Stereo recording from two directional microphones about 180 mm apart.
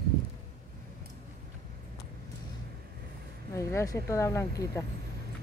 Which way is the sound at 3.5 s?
15° left (ahead or behind).